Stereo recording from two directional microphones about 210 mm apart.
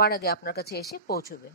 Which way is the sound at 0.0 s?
45° left (ahead or behind).